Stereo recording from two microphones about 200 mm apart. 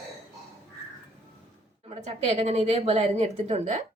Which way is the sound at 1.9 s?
30° right (ahead or behind).